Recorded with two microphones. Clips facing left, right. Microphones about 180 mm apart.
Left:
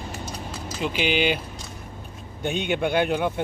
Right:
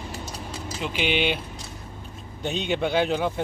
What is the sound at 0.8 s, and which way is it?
Speech, centre (ahead or behind).